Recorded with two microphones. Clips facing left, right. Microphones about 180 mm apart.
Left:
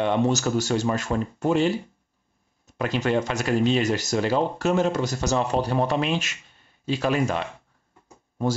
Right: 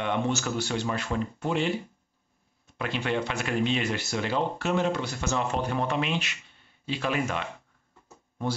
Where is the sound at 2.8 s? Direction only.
40° left (ahead or behind).